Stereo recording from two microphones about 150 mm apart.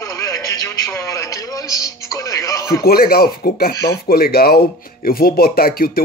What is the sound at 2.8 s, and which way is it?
Speech, 90° left.